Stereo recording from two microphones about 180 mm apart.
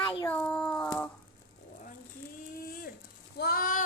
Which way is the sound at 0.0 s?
30° left (ahead or behind).